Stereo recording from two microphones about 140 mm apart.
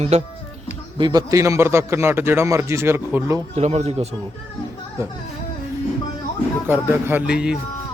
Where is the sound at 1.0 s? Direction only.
30° right (ahead or behind).